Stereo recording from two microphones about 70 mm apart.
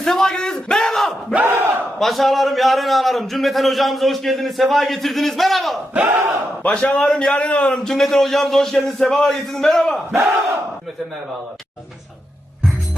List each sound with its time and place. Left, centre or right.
0.0 s a sound: centre
1.5 s battle cry: right
2.0 s a man's voice: centre
5.9 s battle cry: right
6.6 s a man's voice: left